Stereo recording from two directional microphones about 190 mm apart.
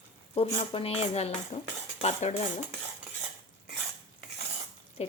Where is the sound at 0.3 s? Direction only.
30° left (ahead or behind).